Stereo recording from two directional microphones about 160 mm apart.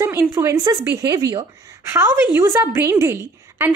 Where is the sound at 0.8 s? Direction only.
15° right (ahead or behind).